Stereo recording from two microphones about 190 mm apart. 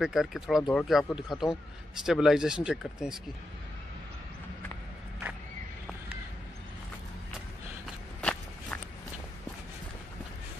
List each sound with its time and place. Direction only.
0.0 s speech: centre (ahead or behind)
8.2 s walk: 5° left (ahead or behind)